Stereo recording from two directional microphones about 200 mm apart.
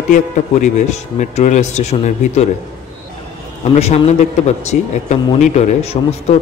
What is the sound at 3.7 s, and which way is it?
A man's voice, 35° left (ahead or behind).